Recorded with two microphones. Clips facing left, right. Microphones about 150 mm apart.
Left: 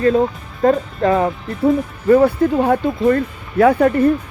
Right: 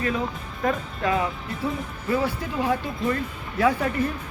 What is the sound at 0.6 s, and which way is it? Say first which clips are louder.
Speech: left 10 dB; 40° left (ahead or behind).